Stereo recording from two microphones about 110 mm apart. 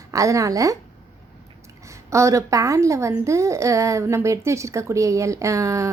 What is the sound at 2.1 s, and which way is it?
A woman's voice, 25° right (ahead or behind).